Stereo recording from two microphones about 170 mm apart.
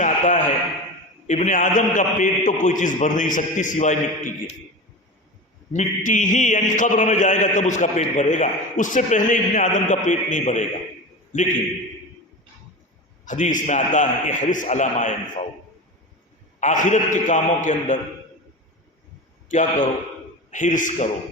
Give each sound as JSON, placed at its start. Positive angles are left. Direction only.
{"t": 0.0, "sound": "a sound", "side_deg": 50}
{"t": 1.3, "sound": "a man's voice", "side_deg": 45}
{"t": 5.7, "sound": "a man's voice", "side_deg": 50}
{"t": 13.2, "sound": "a man's voice", "side_deg": 45}
{"t": 16.6, "sound": "a man's voice", "side_deg": 45}
{"t": 19.5, "sound": "a man's voice", "side_deg": 45}